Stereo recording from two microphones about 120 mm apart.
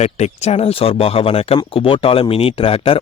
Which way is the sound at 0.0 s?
65° left (ahead or behind).